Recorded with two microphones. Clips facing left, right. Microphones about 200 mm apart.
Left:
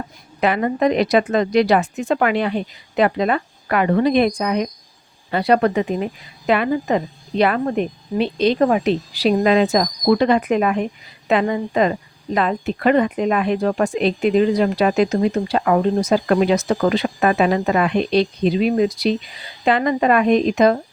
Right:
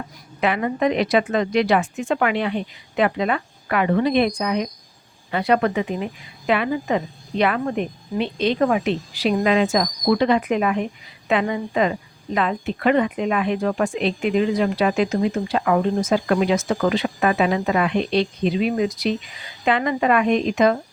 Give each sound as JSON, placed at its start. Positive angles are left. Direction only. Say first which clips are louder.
{"t": 0.4, "sound": "speech", "louder": "left 3 dB", "side_deg": 40}